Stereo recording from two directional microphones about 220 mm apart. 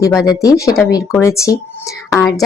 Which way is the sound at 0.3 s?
15° left (ahead or behind).